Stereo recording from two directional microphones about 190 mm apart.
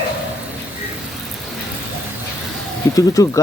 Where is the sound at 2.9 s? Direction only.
20° left (ahead or behind).